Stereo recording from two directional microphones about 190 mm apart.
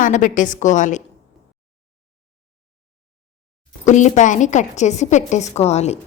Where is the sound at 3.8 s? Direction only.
40° left (ahead or behind).